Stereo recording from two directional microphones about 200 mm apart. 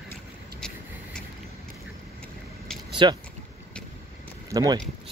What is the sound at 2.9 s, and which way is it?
Speech, 25° right (ahead or behind).